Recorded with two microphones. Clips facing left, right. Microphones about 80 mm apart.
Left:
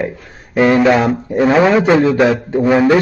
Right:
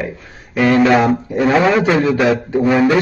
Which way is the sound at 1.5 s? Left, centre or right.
Centre.